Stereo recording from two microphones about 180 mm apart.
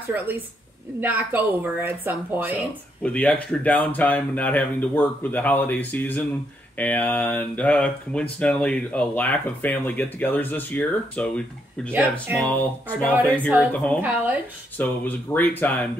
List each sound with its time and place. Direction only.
1.0 s a woman's voice: 10° right (ahead or behind)
3.0 s speech: 5° left (ahead or behind)
11.9 s a woman's voice: 10° right (ahead or behind)
12.4 s speech: 10° left (ahead or behind)